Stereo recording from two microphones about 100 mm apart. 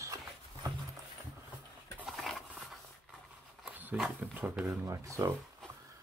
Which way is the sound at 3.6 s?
15° right (ahead or behind).